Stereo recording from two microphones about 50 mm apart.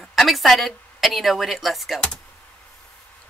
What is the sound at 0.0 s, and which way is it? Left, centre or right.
A woman's voice, centre.